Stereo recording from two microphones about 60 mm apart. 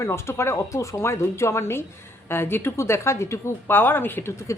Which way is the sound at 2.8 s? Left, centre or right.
Left.